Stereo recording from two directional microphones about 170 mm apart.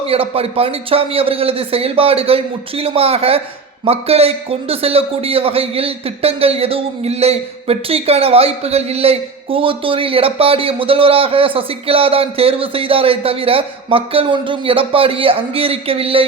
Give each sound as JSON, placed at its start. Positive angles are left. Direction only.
{"t": 0.0, "sound": "a man's voice", "side_deg": -35}